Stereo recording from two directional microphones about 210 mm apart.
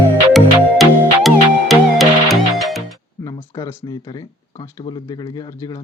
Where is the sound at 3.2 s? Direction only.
20° left (ahead or behind).